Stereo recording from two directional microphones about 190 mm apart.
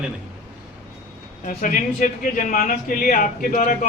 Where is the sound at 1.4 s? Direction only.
45° left (ahead or behind).